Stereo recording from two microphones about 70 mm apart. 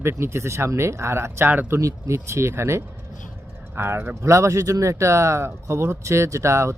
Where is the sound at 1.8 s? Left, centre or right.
Right.